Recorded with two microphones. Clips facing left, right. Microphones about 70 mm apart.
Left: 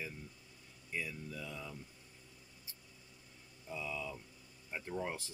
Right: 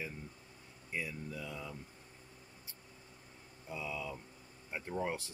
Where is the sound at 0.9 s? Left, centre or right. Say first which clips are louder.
Right 1 dB; centre.